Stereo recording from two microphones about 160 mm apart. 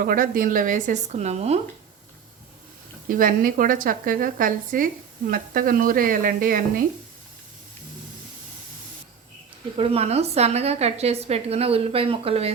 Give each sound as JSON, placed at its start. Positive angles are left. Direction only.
{"t": 0.0, "sound": "a woman's voice", "side_deg": -60}
{"t": 3.1, "sound": "a woman's voice", "side_deg": -60}
{"t": 9.7, "sound": "a woman's voice", "side_deg": -35}